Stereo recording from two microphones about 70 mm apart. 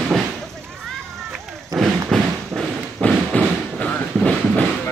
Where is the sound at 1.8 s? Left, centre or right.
Centre.